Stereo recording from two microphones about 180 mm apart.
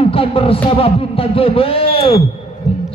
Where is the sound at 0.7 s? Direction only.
30° left (ahead or behind).